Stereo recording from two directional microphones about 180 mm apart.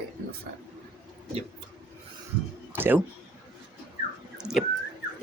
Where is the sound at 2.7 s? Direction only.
10° right (ahead or behind).